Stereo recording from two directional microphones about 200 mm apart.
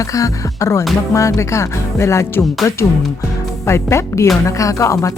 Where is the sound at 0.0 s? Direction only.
15° left (ahead or behind).